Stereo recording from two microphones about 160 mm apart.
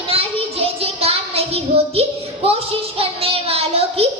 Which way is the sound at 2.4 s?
35° right (ahead or behind).